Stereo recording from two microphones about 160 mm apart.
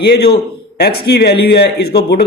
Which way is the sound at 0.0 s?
90° left.